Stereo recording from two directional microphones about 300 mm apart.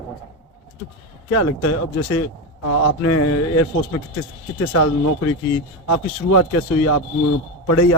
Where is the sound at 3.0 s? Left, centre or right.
Left.